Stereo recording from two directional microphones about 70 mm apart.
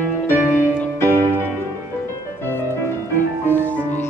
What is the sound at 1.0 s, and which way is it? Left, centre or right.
Music, left.